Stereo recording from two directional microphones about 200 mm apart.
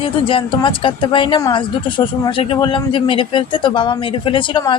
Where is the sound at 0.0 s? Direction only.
25° left (ahead or behind).